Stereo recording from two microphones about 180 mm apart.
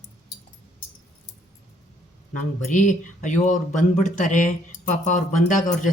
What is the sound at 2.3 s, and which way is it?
Speech, 45° left (ahead or behind).